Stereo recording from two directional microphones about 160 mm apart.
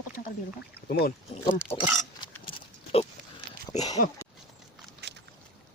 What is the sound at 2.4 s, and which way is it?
Pig, 35° left (ahead or behind).